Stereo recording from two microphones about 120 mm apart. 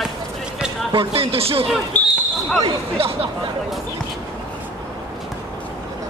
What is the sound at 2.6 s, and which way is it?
Speech, 50° right (ahead or behind).